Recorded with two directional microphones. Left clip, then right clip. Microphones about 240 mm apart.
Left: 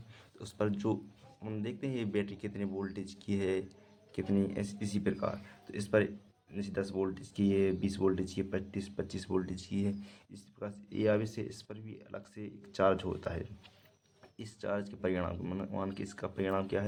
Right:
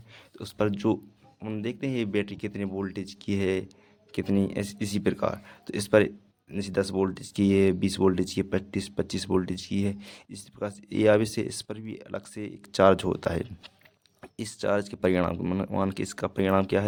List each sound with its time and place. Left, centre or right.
0.3 s speech: right